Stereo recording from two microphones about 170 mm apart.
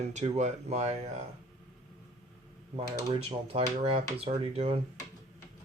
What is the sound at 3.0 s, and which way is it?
Speech, 35° right (ahead or behind).